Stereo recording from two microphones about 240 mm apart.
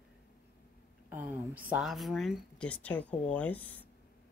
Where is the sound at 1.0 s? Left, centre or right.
Centre.